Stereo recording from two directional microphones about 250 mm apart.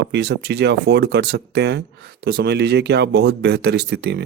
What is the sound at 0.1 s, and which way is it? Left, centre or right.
Speech, right.